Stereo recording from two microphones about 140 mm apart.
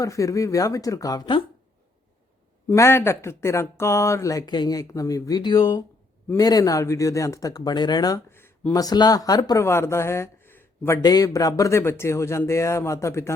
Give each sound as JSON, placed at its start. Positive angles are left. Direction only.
{"t": 0.0, "sound": "speech", "side_deg": 25}
{"t": 2.6, "sound": "speech", "side_deg": 15}